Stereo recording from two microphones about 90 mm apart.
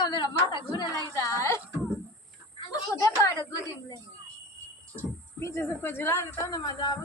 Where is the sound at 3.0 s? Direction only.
35° left (ahead or behind).